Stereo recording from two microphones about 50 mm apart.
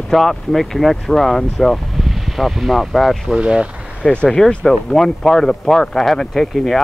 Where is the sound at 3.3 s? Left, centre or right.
Centre.